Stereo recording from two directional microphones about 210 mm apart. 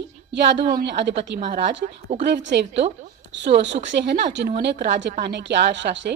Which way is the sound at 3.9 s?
50° right (ahead or behind).